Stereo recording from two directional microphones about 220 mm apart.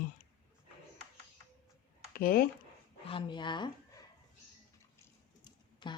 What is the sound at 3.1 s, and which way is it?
Speech, 20° left (ahead or behind).